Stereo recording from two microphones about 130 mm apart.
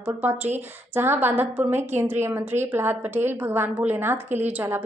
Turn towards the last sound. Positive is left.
turn(degrees=-15)  # may be behind; listen again after turning